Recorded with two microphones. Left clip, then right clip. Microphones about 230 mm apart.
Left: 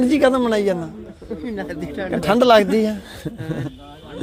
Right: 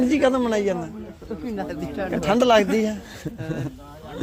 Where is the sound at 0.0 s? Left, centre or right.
Centre.